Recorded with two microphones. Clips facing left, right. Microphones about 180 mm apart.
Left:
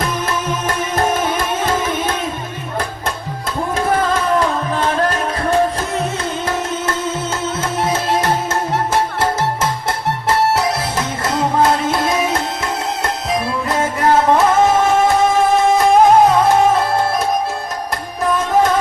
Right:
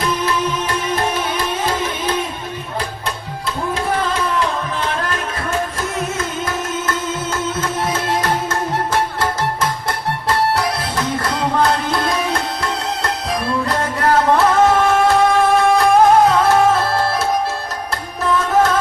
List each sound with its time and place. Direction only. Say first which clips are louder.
10.2 s music: left 2 dB; 25° left (ahead or behind)
14.0 s music: left 1 dB; 20° left (ahead or behind)